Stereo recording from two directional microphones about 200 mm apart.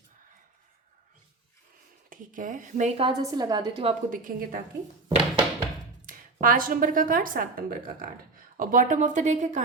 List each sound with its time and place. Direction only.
2.0 s speech: 40° right (ahead or behind)
3.0 s a woman's voice: 20° right (ahead or behind)
4.1 s speech: 40° right (ahead or behind)
5.0 s thunk: 25° right (ahead or behind)
6.1 s a woman's voice: 45° right (ahead or behind)